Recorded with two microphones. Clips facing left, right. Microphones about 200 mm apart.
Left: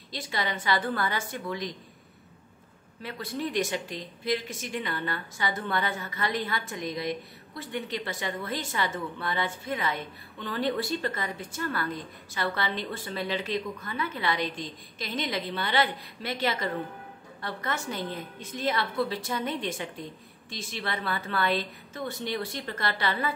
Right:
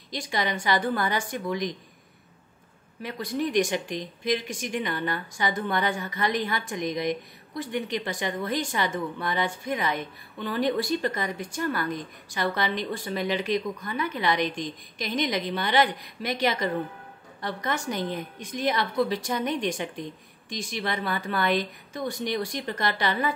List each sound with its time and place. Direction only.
0.1 s speech: 15° right (ahead or behind)
3.0 s speech: 15° right (ahead or behind)